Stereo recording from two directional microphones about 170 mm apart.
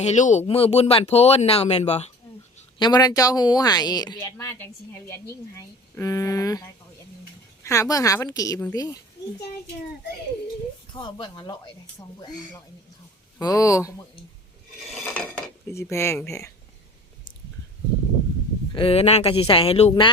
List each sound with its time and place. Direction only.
0.0 s speech: 45° left (ahead or behind)
2.7 s a woman's voice: 25° left (ahead or behind)
10.9 s a woman's voice: 30° left (ahead or behind)
15.1 s dishes: 10° left (ahead or behind)
18.7 s speech: 35° left (ahead or behind)